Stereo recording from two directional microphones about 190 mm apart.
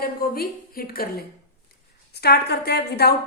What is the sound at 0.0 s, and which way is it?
A woman's voice, 50° left (ahead or behind).